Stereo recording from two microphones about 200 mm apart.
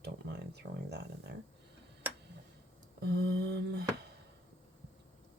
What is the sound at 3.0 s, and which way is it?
Speech, 55° right (ahead or behind).